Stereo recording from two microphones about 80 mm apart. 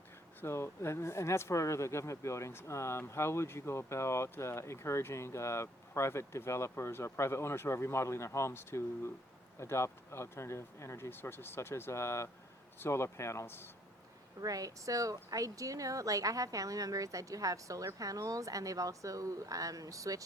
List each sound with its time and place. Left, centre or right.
0.4 s speech: left
14.4 s a woman's voice: right